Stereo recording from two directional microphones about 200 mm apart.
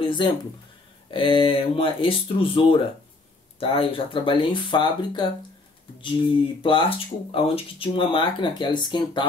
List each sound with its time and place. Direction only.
0.0 s speech: 25° left (ahead or behind)